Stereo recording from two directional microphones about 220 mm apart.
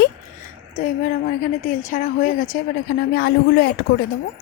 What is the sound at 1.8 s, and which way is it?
A woman's voice, 35° left (ahead or behind).